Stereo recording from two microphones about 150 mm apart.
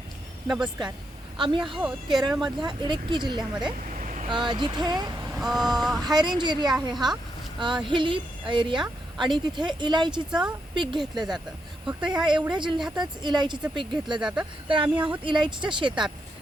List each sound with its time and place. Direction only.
0.4 s vehicle: 5° right (ahead or behind)
1.4 s speech: 35° right (ahead or behind)
1.6 s vehicle: centre (ahead or behind)
2.4 s speech: 30° right (ahead or behind)
3.8 s vehicle: 60° right (ahead or behind)
4.3 s speech: 30° right (ahead or behind)
5.4 s vehicle: centre (ahead or behind)
6.0 s speech: 30° right (ahead or behind)
14.2 s vehicle: 5° right (ahead or behind)
14.9 s speech: 10° right (ahead or behind)
15.2 s speech: 30° right (ahead or behind)